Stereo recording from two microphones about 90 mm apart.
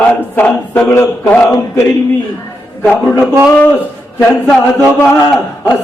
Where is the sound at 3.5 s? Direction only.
20° left (ahead or behind).